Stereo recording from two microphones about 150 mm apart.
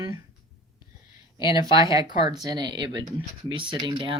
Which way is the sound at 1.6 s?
25° right (ahead or behind).